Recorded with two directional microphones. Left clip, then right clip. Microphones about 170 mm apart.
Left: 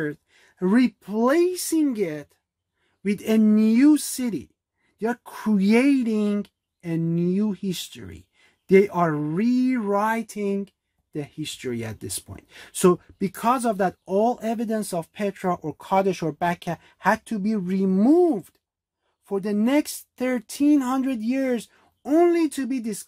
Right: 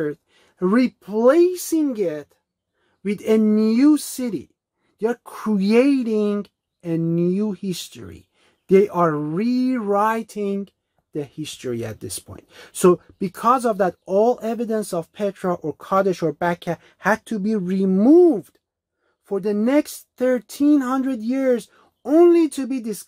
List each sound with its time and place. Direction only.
0.0 s speech: 15° left (ahead or behind)